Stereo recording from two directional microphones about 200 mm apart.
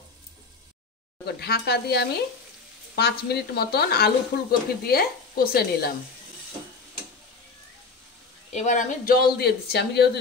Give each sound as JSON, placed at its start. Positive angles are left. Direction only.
{"t": 1.2, "sound": "speech", "side_deg": 55}
{"t": 8.5, "sound": "speech", "side_deg": 35}